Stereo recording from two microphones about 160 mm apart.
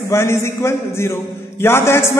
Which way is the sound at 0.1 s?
15° left (ahead or behind).